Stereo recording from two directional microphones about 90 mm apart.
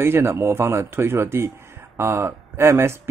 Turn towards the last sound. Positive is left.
turn(degrees=-30)  # may be behind; listen again after turning